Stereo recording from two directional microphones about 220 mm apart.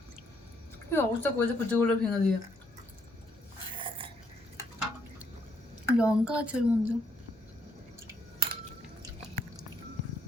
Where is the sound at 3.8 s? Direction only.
25° right (ahead or behind).